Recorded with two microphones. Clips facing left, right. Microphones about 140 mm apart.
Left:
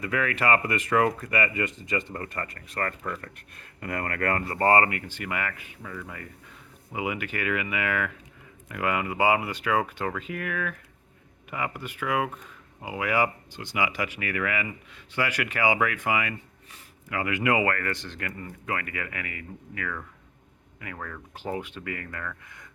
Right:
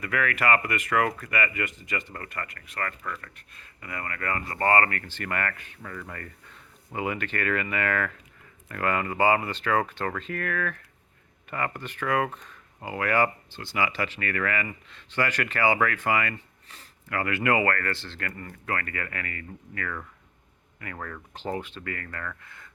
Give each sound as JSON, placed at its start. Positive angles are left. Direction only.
{"t": 0.0, "sound": "speech", "side_deg": 25}
{"t": 3.3, "sound": "speech", "side_deg": 55}
{"t": 4.4, "sound": "speech", "side_deg": 25}
{"t": 4.9, "sound": "speech", "side_deg": 15}
{"t": 20.8, "sound": "speech", "side_deg": 0}
{"t": 21.3, "sound": "speech", "side_deg": 10}
{"t": 22.4, "sound": "a sound", "side_deg": 15}